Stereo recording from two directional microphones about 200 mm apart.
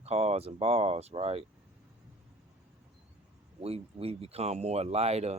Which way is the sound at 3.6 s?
30° right (ahead or behind).